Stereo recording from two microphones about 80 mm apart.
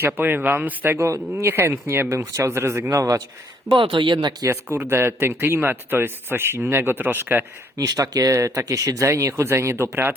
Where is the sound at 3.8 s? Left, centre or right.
Right.